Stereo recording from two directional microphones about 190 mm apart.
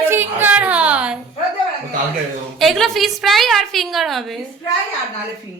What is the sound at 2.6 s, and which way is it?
A woman's voice, centre (ahead or behind).